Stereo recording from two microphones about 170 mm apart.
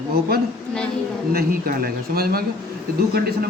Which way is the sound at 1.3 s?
65° right (ahead or behind).